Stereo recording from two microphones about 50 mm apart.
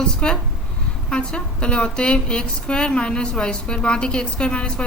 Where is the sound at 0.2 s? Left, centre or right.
Left.